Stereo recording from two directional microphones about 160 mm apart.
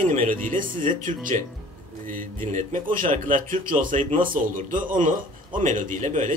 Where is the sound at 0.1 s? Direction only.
55° right (ahead or behind).